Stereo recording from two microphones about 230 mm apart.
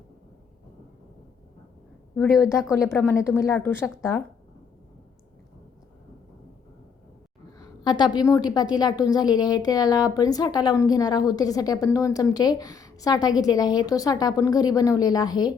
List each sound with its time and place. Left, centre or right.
2.4 s a woman's voice: centre
7.6 s a woman's voice: centre